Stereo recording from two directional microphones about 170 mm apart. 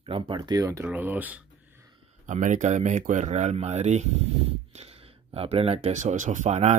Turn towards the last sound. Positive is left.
turn(degrees=-40)  # may be behind; listen again after turning